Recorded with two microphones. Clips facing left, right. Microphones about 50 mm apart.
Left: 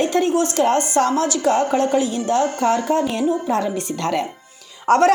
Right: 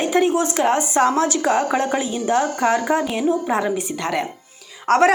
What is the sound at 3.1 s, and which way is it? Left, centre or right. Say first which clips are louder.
Speech: even; centre.